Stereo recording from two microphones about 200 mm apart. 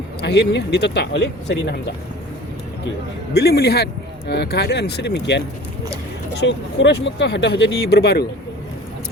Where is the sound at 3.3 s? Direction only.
50° left (ahead or behind).